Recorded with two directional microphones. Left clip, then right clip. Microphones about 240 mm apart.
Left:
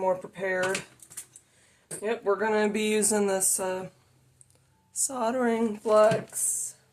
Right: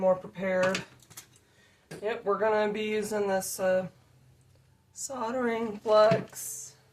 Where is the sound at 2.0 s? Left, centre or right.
Left.